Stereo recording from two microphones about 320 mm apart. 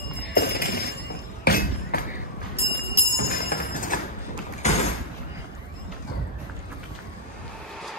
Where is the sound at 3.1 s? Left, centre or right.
Left.